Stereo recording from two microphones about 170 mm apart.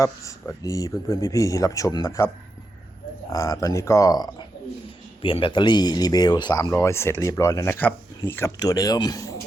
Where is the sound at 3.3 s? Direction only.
20° left (ahead or behind).